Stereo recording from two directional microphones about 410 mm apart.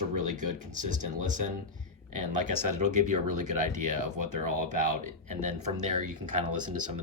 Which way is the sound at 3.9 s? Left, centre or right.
Right.